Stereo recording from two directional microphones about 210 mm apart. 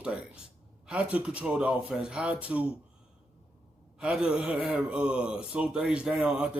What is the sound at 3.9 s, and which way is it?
Speech, 5° right (ahead or behind).